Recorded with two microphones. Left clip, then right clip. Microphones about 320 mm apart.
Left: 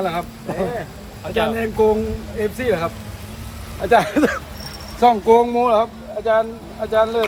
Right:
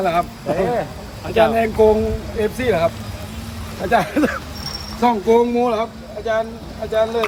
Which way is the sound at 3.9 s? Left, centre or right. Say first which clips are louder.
Left 2 dB; left.